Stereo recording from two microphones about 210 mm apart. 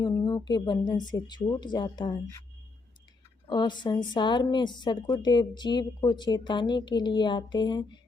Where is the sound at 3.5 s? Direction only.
20° left (ahead or behind).